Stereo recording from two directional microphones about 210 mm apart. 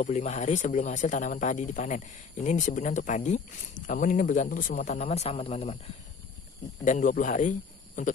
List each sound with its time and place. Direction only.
0.0 s speech: 35° left (ahead or behind)